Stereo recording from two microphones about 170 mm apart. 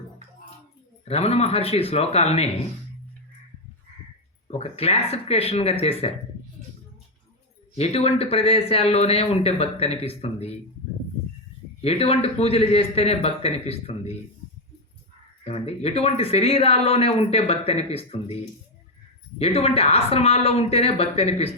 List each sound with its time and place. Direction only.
1.0 s speech: 35° left (ahead or behind)
4.5 s speech: 35° left (ahead or behind)
7.8 s speech: 35° left (ahead or behind)
11.8 s speech: 35° left (ahead or behind)
15.4 s speech: 35° left (ahead or behind)
19.4 s speech: 35° left (ahead or behind)